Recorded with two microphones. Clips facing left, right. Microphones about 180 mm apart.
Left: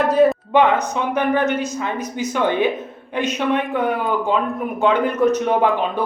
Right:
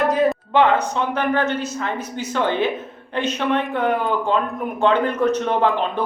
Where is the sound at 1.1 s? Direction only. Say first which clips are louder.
Left 4 dB; 15° left (ahead or behind).